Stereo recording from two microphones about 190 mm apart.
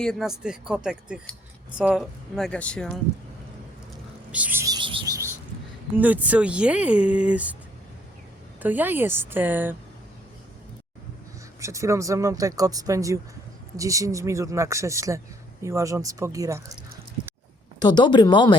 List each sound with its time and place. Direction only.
0.0 s speech: centre (ahead or behind)
4.3 s a sound: 10° right (ahead or behind)
6.0 s speech: 10° right (ahead or behind)
8.6 s speech: 10° right (ahead or behind)
11.6 s speech: 15° right (ahead or behind)
17.7 s speech: 20° left (ahead or behind)